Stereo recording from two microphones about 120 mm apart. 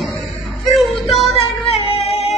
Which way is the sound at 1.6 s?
60° left (ahead or behind).